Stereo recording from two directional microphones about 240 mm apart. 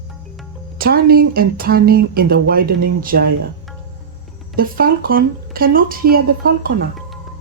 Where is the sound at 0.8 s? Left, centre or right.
Right.